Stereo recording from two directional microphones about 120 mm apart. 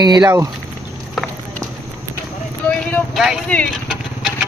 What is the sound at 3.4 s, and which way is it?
Speech, 10° left (ahead or behind).